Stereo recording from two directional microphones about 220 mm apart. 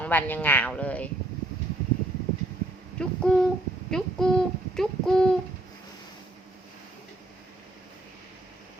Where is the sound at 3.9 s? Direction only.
Centre (ahead or behind).